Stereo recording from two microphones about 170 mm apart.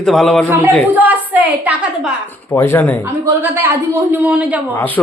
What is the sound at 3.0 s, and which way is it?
A woman's voice, 10° right (ahead or behind).